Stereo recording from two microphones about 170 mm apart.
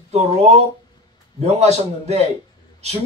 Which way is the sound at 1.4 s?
40° right (ahead or behind).